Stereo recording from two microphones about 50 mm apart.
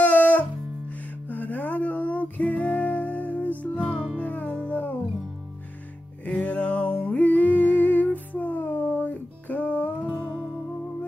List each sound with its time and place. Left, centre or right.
0.0 s music: left
6.2 s music: left
10.0 s music: right